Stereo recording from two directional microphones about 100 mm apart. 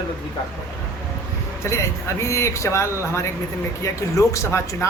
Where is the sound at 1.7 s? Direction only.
30° left (ahead or behind).